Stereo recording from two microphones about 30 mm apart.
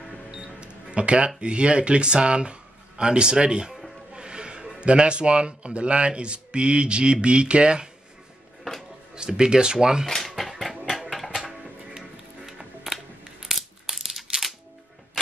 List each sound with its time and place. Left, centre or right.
0.9 s speech: right
4.1 s a sound: right
4.7 s speech: right
9.1 s speech: right
10.1 s a sound: centre
11.0 s music: centre
12.4 s music: centre
13.4 s crushing: centre